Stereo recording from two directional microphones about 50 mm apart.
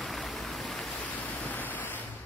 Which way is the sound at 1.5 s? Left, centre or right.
Left.